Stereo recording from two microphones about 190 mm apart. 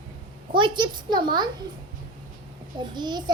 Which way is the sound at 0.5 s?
25° right (ahead or behind).